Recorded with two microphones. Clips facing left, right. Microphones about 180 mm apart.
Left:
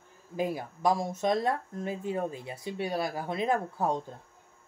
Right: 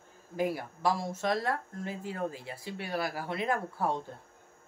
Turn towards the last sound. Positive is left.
turn(degrees=20)  # may be behind; listen again after turning